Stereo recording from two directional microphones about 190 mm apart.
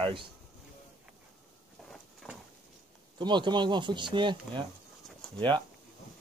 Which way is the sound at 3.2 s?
25° right (ahead or behind).